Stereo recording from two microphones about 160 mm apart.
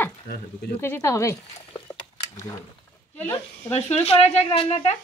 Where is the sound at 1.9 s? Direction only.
20° left (ahead or behind).